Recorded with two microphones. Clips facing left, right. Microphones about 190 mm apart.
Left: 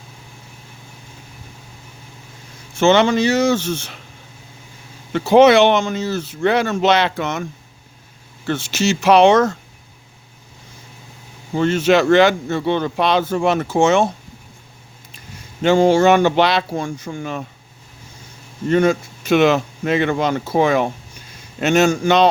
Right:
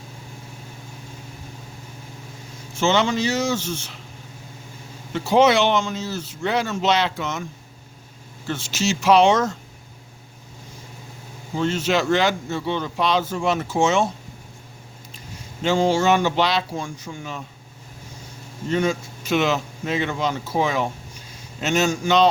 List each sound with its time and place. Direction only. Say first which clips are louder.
2.7 s speech: left 6 dB; 60° left (ahead or behind)
5.1 s speech: left 6 dB; 65° left (ahead or behind)
8.4 s speech: left 5 dB; 65° left (ahead or behind)
11.5 s speech: left 6 dB; 60° left (ahead or behind)
15.6 s speech: left 6 dB; 60° left (ahead or behind)
18.7 s speech: left 6 dB; 60° left (ahead or behind)